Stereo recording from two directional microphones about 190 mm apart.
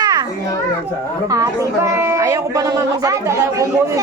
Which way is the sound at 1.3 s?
15° right (ahead or behind).